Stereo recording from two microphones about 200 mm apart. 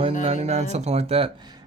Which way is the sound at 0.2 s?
30° right (ahead or behind).